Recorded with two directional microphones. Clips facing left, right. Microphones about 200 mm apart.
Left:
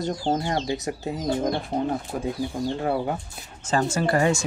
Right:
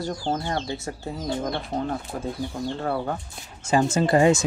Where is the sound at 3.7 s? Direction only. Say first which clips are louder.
Right 3 dB; 15° right (ahead or behind).